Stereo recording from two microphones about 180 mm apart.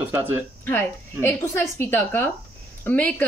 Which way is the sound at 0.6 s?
10° left (ahead or behind).